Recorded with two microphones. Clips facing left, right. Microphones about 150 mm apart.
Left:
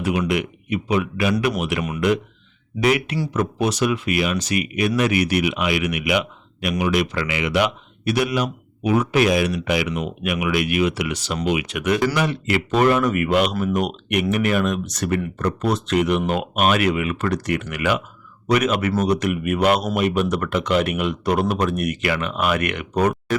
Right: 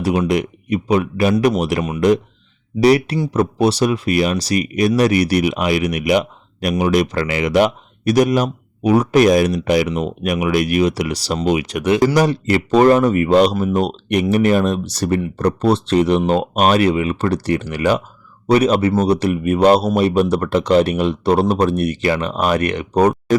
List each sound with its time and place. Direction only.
0.3 s speech: 40° right (ahead or behind)